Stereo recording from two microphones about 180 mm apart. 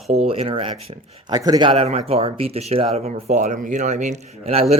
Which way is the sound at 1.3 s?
20° right (ahead or behind).